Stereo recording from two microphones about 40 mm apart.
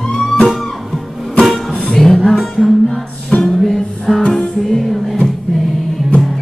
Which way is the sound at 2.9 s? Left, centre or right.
Centre.